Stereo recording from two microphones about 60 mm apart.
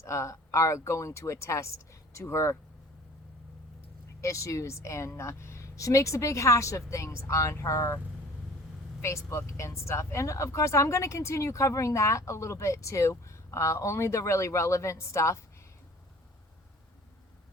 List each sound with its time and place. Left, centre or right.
0.0 s speech: left
4.2 s speech: left
9.0 s speech: left